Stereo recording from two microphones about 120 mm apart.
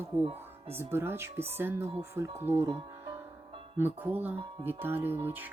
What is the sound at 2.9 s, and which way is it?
Music, 25° right (ahead or behind).